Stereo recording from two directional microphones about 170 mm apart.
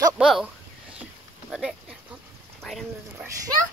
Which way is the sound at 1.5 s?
5° right (ahead or behind).